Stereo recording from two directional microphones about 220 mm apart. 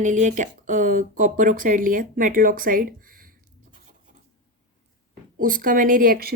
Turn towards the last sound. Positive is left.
turn(degrees=-40)  # may be behind; listen again after turning